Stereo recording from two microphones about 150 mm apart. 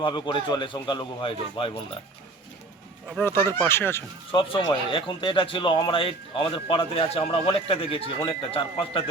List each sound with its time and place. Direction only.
0.0 s speech: 30° left (ahead or behind)
3.1 s speech: 10° left (ahead or behind)
4.3 s speech: 35° left (ahead or behind)